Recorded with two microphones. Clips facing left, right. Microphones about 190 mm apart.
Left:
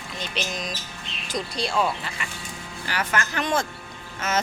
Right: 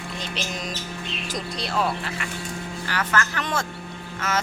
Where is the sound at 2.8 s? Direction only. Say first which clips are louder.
Right 1 dB; 15° left (ahead or behind).